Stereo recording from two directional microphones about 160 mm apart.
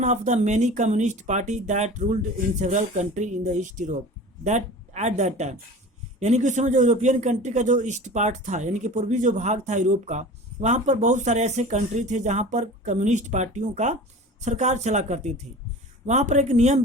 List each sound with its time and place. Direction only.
0.0 s a man's voice: 45° right (ahead or behind)